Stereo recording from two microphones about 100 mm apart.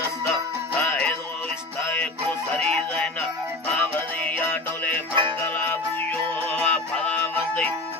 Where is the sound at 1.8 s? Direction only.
25° left (ahead or behind).